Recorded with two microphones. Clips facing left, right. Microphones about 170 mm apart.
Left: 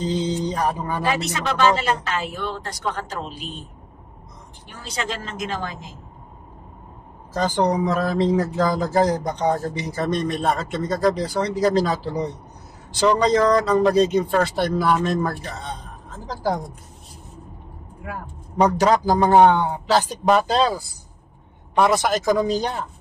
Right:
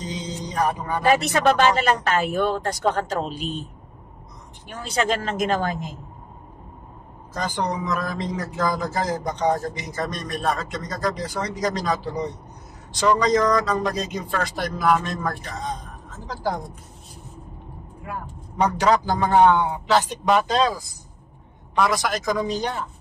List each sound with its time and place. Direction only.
0.0 s a sound: 30° left (ahead or behind)
1.0 s a woman's voice: 50° right (ahead or behind)
4.9 s a woman's voice: 55° right (ahead or behind)
7.3 s speech: 35° left (ahead or behind)
18.6 s a man's voice: 35° left (ahead or behind)